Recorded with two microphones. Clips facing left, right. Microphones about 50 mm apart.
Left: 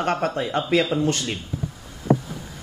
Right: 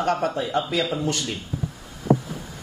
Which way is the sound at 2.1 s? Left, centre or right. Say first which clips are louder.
Even; left.